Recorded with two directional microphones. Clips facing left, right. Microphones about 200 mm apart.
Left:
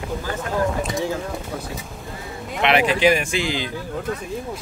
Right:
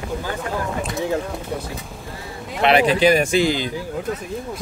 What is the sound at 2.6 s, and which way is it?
A man's voice, 35° right (ahead or behind).